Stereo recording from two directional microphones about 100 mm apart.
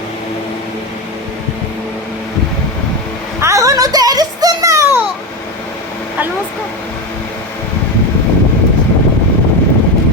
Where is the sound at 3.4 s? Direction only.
30° right (ahead or behind).